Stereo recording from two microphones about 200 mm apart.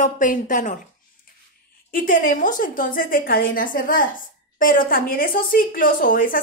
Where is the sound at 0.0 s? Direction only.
40° left (ahead or behind).